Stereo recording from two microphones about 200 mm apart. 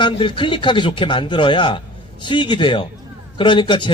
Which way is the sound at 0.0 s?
25° left (ahead or behind).